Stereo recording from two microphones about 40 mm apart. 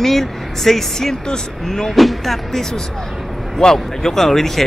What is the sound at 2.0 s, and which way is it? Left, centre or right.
Speech, centre.